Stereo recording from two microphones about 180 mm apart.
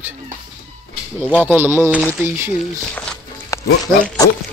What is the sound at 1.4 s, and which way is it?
Speech, 10° right (ahead or behind).